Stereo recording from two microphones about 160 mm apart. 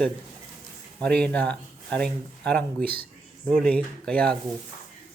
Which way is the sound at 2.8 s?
70° right (ahead or behind).